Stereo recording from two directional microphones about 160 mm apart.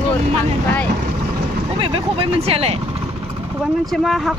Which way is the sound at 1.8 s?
35° right (ahead or behind).